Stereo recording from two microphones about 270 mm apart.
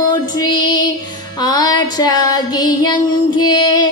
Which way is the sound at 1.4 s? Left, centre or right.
Centre.